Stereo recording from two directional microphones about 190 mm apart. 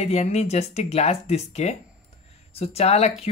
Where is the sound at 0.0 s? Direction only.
35° left (ahead or behind).